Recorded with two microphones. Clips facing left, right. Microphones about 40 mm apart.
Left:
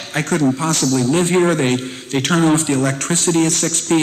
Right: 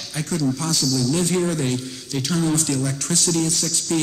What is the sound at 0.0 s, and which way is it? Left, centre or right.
Speech, left.